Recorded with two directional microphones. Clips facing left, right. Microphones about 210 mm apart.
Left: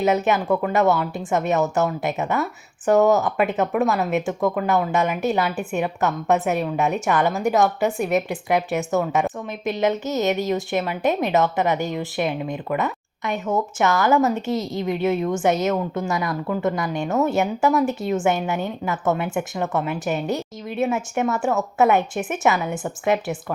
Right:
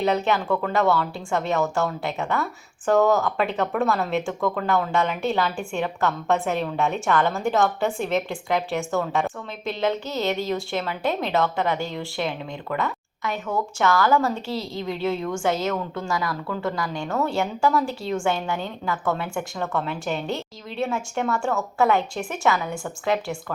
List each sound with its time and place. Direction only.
0.3 s a woman's voice: 20° left (ahead or behind)
6.0 s a woman's voice: 20° left (ahead or behind)
20.9 s a woman's voice: 20° left (ahead or behind)